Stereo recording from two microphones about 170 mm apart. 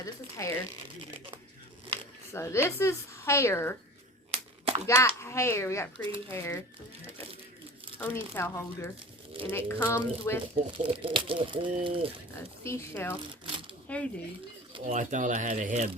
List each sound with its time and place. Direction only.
0.0 s a sound: 20° left (ahead or behind)
2.3 s a woman's voice: 15° left (ahead or behind)
4.3 s a sound: 35° right (ahead or behind)
4.9 s a woman's voice: 15° left (ahead or behind)
7.9 s a woman's voice: 15° left (ahead or behind)
10.5 s speech: 30° right (ahead or behind)
12.6 s a woman's voice: 15° left (ahead or behind)
13.4 s shuffling cards: 30° right (ahead or behind)
13.8 s speech: 5° left (ahead or behind)
14.8 s speech: 50° right (ahead or behind)